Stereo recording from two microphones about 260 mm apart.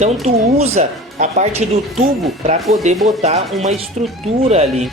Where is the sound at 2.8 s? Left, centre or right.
Right.